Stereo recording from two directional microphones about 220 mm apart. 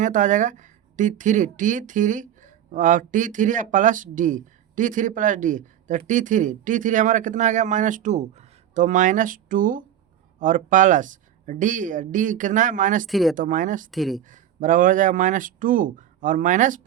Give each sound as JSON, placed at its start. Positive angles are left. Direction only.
{"t": 0.0, "sound": "speech", "side_deg": -35}
{"t": 13.1, "sound": "speech", "side_deg": 0}
{"t": 13.3, "sound": "speech", "side_deg": -35}
{"t": 13.9, "sound": "speech", "side_deg": 0}
{"t": 14.3, "sound": "speech", "side_deg": -35}